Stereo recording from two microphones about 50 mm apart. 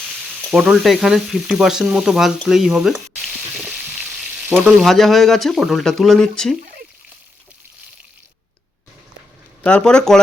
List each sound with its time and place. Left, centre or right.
0.6 s frying: centre
4.4 s frying: right
4.8 s speech: centre
9.6 s speech: centre